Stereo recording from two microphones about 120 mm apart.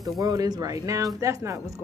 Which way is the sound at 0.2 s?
30° right (ahead or behind).